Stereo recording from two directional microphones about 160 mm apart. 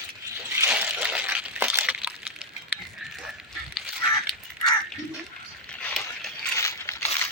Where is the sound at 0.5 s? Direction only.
10° right (ahead or behind).